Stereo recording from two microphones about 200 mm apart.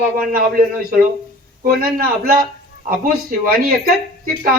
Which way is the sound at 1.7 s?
45° right (ahead or behind).